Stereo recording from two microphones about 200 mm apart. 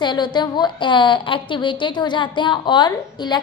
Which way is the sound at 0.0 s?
20° left (ahead or behind).